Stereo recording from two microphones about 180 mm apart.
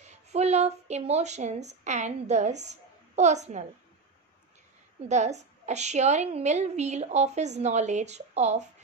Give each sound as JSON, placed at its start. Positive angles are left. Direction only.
{"t": 0.0, "sound": "speech", "side_deg": -40}
{"t": 5.0, "sound": "a woman's voice", "side_deg": -40}